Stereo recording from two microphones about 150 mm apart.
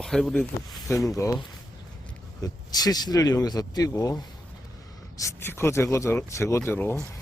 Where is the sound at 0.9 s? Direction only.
20° left (ahead or behind).